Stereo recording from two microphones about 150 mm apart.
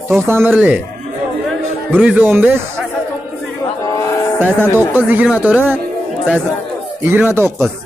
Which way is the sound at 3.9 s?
20° left (ahead or behind).